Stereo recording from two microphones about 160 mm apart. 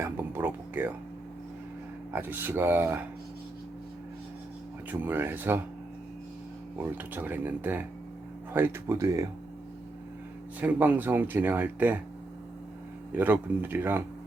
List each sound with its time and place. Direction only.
0.0 s music: 15° right (ahead or behind)
2.1 s speech: 10° right (ahead or behind)
4.9 s speech: 10° right (ahead or behind)
6.7 s speech: 10° right (ahead or behind)
10.6 s speech: 10° right (ahead or behind)
13.1 s speech: 10° right (ahead or behind)